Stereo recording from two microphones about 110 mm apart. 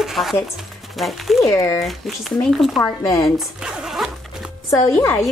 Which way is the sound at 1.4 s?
30° left (ahead or behind).